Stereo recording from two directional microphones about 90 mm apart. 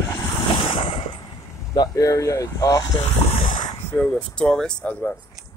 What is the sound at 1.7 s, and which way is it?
Speech, 45° left (ahead or behind).